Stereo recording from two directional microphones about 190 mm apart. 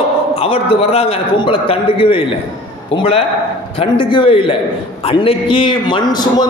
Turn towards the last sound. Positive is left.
turn(degrees=25)  # may be behind; listen again after turning